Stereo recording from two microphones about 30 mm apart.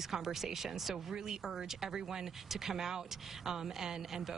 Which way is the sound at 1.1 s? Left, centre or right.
Centre.